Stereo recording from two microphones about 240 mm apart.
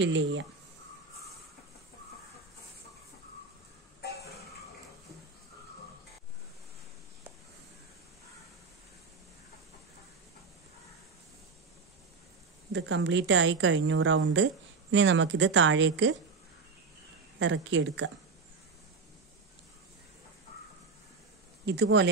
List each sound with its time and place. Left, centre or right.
0.0 s a woman's voice: right
12.7 s a woman's voice: right
17.4 s a woman's voice: right
21.6 s a woman's voice: right